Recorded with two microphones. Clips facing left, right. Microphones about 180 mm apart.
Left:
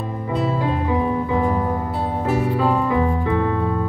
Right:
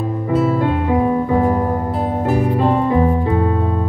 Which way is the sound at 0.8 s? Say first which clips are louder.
Right 5 dB; 45° right (ahead or behind).